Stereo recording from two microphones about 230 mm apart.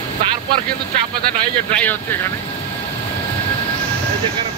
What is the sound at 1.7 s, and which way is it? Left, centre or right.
Speech, centre.